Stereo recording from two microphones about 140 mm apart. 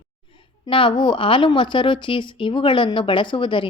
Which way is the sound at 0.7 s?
35° left (ahead or behind).